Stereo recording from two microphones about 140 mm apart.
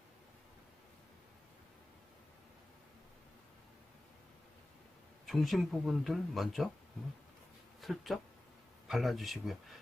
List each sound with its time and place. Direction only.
5.2 s speech: centre (ahead or behind)
7.8 s speech: centre (ahead or behind)